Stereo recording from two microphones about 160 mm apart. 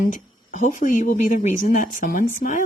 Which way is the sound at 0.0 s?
50° left (ahead or behind).